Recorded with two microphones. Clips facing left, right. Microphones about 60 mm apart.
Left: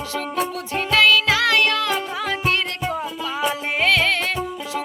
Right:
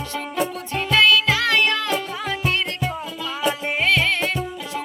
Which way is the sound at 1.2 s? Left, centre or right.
Left.